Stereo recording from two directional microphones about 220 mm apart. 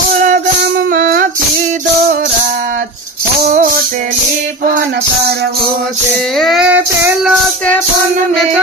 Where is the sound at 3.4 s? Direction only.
35° right (ahead or behind).